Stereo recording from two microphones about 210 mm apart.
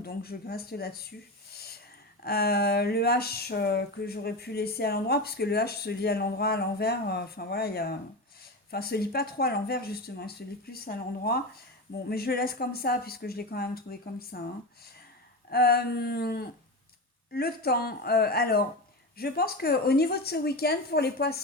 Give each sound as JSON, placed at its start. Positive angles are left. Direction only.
{"t": 0.0, "sound": "speech", "side_deg": 45}
{"t": 1.5, "sound": "a sound", "side_deg": 50}
{"t": 2.2, "sound": "speech", "side_deg": 50}
{"t": 15.4, "sound": "speech", "side_deg": 50}